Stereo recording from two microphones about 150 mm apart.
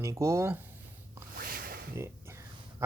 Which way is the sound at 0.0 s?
20° right (ahead or behind).